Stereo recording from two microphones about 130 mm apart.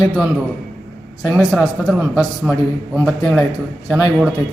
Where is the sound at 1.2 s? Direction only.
5° right (ahead or behind).